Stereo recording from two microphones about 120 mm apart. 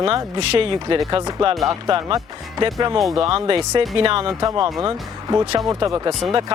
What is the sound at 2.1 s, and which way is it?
Speech, 30° right (ahead or behind).